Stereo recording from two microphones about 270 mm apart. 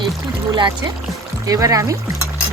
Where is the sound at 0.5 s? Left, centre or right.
Centre.